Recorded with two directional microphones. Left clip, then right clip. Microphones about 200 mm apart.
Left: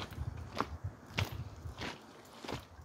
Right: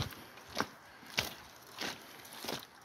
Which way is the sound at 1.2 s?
60° right (ahead or behind).